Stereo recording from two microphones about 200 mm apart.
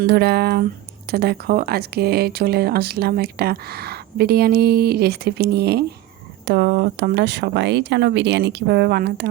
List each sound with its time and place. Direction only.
0.0 s speech: 55° right (ahead or behind)